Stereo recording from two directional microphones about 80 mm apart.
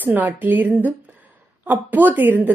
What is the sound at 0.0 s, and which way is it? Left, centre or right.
A woman's voice, right.